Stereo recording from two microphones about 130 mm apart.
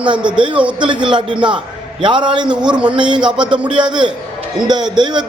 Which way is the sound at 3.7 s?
40° right (ahead or behind).